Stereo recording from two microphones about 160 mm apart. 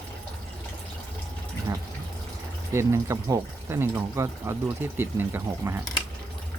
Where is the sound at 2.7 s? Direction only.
20° right (ahead or behind).